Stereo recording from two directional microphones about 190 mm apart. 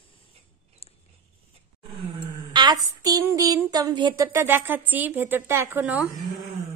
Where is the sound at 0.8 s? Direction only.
30° left (ahead or behind).